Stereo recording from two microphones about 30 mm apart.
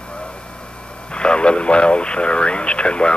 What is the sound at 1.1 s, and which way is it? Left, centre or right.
Radio, left.